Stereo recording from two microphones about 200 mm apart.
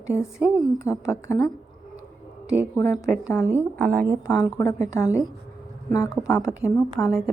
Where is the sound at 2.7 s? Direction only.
15° left (ahead or behind).